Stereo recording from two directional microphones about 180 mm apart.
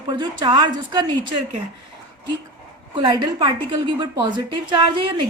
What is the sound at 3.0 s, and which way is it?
Speech, 30° right (ahead or behind).